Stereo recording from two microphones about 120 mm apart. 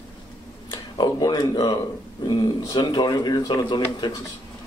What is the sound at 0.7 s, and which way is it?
Speech, 35° left (ahead or behind).